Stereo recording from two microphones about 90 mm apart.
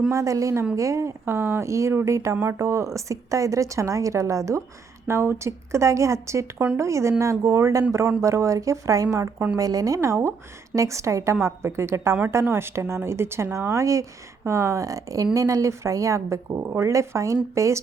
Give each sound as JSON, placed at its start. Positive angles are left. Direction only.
{"t": 0.1, "sound": "a woman's voice", "side_deg": -35}